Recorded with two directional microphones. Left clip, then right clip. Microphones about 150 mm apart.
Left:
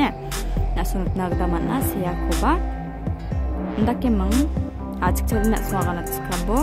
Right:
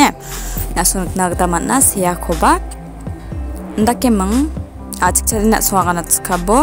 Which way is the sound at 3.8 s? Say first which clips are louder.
Right 10 dB; 30° right (ahead or behind).